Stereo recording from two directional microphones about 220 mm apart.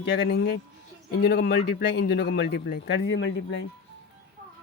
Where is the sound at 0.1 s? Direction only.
50° left (ahead or behind).